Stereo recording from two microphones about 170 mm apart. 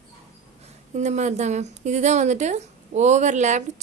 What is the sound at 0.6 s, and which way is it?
A woman's voice, 45° right (ahead or behind).